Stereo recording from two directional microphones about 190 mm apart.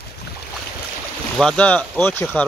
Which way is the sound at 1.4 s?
5° left (ahead or behind).